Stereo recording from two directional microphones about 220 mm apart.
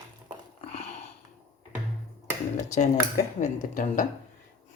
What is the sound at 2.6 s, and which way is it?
Speech, 30° left (ahead or behind).